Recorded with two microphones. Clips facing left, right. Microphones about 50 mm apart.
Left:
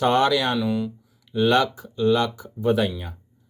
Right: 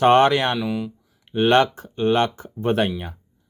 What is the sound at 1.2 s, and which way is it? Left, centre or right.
Speech, right.